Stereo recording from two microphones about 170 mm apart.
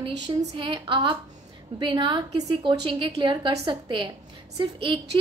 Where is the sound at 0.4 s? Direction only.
30° right (ahead or behind).